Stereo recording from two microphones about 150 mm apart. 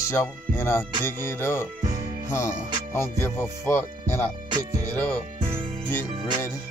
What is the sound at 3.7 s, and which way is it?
Speech, 15° left (ahead or behind).